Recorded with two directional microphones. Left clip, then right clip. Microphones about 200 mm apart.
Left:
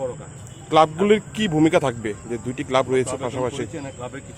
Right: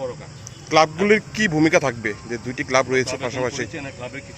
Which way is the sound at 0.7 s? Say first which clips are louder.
Even; 10° left (ahead or behind).